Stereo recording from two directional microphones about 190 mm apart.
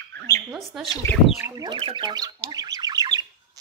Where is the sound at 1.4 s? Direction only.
20° right (ahead or behind).